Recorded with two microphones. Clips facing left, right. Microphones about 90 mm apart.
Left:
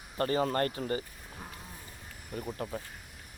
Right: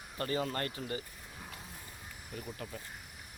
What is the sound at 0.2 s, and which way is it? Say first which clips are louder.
Speech: left 6 dB; 40° left (ahead or behind).